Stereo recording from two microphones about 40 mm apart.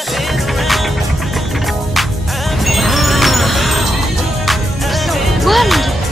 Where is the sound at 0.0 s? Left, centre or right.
Centre.